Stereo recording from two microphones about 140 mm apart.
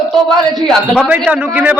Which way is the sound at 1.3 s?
10° right (ahead or behind).